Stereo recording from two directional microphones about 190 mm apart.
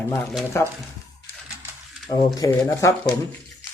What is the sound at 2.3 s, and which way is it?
Speech, 15° left (ahead or behind).